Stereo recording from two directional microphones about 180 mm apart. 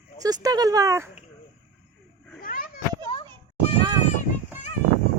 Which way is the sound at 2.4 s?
50° left (ahead or behind).